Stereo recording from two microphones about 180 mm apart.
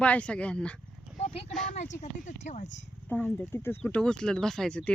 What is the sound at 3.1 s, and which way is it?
Speech, 10° left (ahead or behind).